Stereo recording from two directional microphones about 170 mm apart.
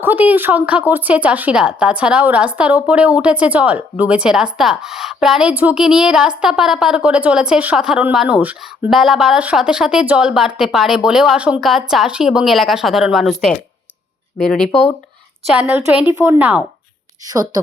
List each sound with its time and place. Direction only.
0.0 s a woman's voice: 10° right (ahead or behind)
15.4 s a woman's voice: 5° right (ahead or behind)
17.2 s a woman's voice: 20° right (ahead or behind)